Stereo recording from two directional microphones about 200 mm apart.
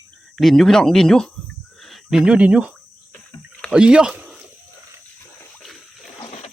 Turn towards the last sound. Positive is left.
turn(degrees=25)  # may be behind; listen again after turning